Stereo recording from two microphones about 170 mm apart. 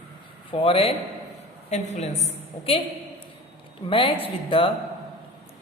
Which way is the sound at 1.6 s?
45° left (ahead or behind).